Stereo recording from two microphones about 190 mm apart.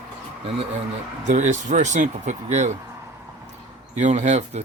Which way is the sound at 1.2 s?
40° right (ahead or behind).